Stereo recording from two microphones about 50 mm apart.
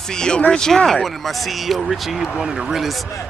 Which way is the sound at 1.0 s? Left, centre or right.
Centre.